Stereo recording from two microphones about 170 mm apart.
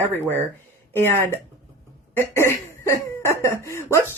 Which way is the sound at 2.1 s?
15° left (ahead or behind).